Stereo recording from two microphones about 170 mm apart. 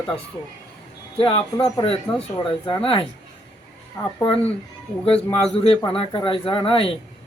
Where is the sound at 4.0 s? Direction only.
15° left (ahead or behind).